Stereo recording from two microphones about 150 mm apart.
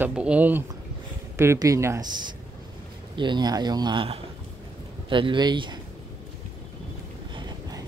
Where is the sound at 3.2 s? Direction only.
30° right (ahead or behind).